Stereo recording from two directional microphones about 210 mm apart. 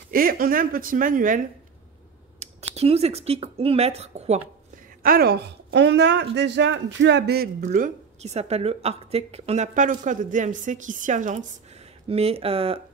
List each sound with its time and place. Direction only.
0.1 s speech: 45° right (ahead or behind)
2.4 s speech: 30° right (ahead or behind)
5.0 s speech: 45° right (ahead or behind); by 12.8 s 25° right (ahead or behind)